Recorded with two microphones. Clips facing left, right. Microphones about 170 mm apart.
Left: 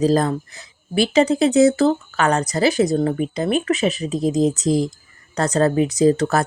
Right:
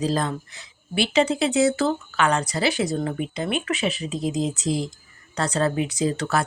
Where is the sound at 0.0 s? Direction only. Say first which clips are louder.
Left 7 dB; 45° left (ahead or behind).